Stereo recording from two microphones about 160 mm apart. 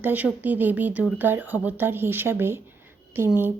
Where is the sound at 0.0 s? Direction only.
10° right (ahead or behind).